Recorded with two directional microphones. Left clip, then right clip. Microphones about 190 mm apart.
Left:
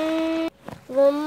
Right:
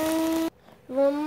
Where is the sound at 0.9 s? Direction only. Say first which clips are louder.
Left 5 dB; 25° left (ahead or behind).